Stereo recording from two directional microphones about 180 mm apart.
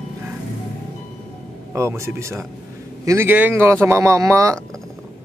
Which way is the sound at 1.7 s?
15° right (ahead or behind).